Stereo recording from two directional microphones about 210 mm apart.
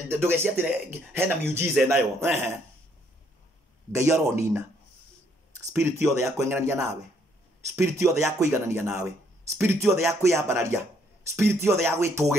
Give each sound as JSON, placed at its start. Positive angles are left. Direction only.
{"t": 0.1, "sound": "speech", "side_deg": -10}
{"t": 3.9, "sound": "speech", "side_deg": -15}
{"t": 5.7, "sound": "speech", "side_deg": -10}